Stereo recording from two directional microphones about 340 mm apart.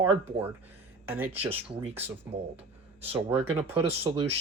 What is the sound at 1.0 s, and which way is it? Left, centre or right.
Speech, centre.